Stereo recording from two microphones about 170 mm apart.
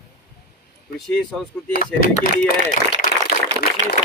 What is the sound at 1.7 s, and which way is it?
Speech, 60° left (ahead or behind).